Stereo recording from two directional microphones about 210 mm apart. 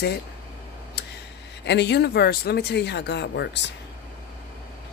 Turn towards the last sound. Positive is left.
turn(degrees=55)  # may be behind; listen again after turning